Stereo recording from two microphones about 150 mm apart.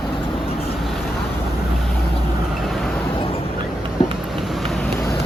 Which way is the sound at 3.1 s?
40° left (ahead or behind).